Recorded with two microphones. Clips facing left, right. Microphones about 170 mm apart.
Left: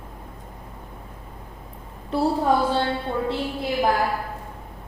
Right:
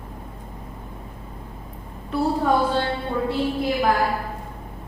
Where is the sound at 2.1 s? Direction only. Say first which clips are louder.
Left 1 dB; 30° left (ahead or behind).